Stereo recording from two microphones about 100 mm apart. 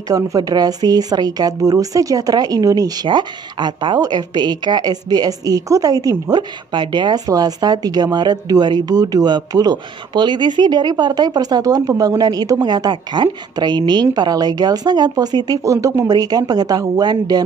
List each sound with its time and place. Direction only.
0.1 s speech: 40° right (ahead or behind)